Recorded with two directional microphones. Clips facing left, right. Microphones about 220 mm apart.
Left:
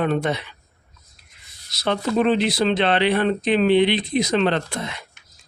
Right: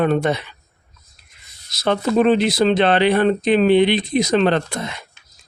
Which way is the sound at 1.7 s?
45° right (ahead or behind).